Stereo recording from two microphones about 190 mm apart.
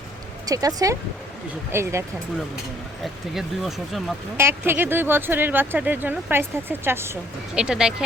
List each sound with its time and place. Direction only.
0.4 s speech: 20° right (ahead or behind)
3.0 s speech: centre (ahead or behind)
4.4 s speech: 10° right (ahead or behind)